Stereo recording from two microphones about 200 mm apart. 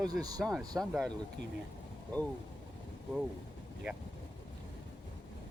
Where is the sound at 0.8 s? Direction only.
Centre (ahead or behind).